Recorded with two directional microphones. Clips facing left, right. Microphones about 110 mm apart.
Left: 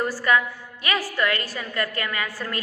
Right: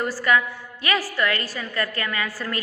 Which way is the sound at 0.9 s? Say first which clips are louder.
Right 1 dB; 20° left (ahead or behind).